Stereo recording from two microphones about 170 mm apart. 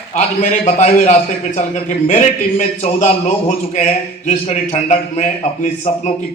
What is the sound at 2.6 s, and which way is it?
A man's voice, 45° left (ahead or behind).